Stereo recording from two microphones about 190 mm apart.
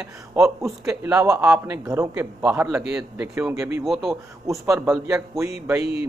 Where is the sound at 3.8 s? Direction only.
Centre (ahead or behind).